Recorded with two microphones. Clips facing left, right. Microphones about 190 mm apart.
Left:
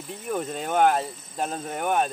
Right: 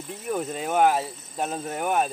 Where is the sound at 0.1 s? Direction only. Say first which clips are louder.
Even; 5° right (ahead or behind).